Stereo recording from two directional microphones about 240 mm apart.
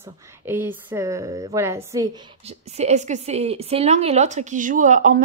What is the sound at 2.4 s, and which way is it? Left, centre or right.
A woman's voice, right.